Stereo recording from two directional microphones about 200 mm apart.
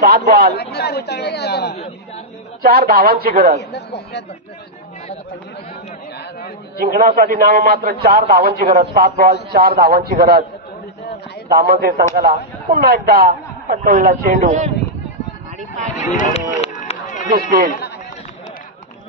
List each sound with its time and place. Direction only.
0.0 s a man's voice: 50° right (ahead or behind)
0.6 s speech: 55° left (ahead or behind)
2.6 s a man's voice: 45° right (ahead or behind)
3.5 s speech: 55° left (ahead or behind)
6.8 s a man's voice: 50° right (ahead or behind)
11.4 s a man's voice: 50° right (ahead or behind)
16.0 s run: 35° left (ahead or behind)
17.3 s a man's voice: 50° right (ahead or behind)